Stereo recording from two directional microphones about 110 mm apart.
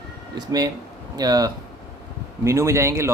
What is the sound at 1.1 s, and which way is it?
Speech, 35° right (ahead or behind).